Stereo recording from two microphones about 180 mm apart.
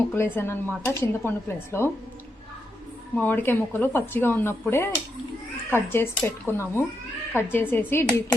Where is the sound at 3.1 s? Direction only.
10° left (ahead or behind).